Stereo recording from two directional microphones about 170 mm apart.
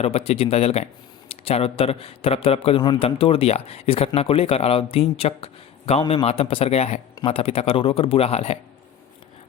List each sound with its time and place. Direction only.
0.0 s a man's voice: 35° left (ahead or behind)